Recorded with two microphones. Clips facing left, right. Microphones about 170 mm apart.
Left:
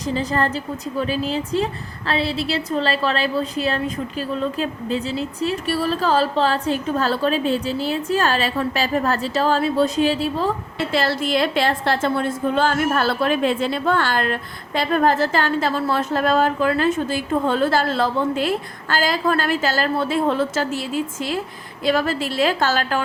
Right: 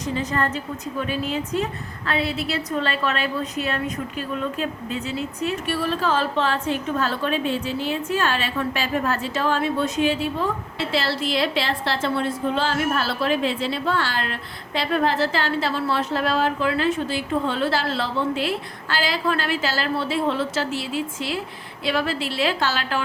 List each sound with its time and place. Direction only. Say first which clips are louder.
0.1 s a woman's voice: left 3 dB; 35° left (ahead or behind)
10.8 s a woman's voice: left 3 dB; 50° left (ahead or behind)